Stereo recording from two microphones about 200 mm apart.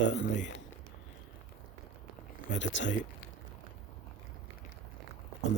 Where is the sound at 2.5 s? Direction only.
40° left (ahead or behind).